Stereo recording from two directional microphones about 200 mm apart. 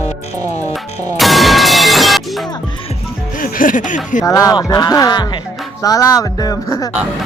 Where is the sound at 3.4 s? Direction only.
45° left (ahead or behind).